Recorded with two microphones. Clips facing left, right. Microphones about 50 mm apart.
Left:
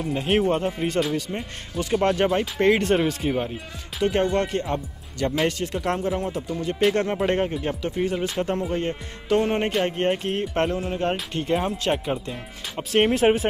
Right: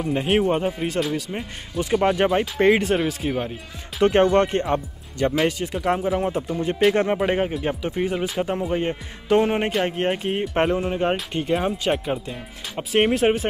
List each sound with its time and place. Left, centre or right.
0.3 s speech: centre
4.0 s speech: right
5.3 s speech: centre
6.2 s speech: right
7.0 s speech: centre
10.5 s speech: right
11.1 s speech: centre